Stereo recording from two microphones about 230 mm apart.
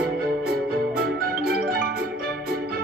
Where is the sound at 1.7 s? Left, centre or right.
Right.